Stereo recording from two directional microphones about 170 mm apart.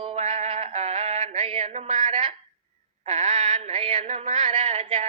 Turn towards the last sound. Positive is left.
turn(degrees=-35)  # may be behind; listen again after turning